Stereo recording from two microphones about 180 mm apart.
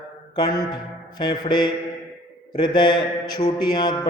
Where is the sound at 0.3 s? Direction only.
20° left (ahead or behind).